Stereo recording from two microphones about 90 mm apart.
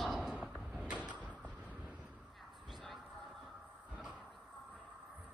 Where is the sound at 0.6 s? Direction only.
10° right (ahead or behind).